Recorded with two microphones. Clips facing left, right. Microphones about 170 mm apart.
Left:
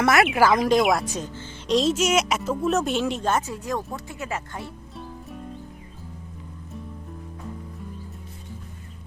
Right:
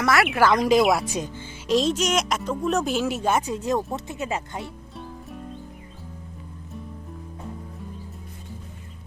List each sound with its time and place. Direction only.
0.0 s speech: 20° left (ahead or behind)
0.3 s speech: 5° left (ahead or behind)
1.1 s speech: 15° right (ahead or behind)
1.6 s speech: centre (ahead or behind); by 4.6 s 20° right (ahead or behind)
4.6 s music: centre (ahead or behind)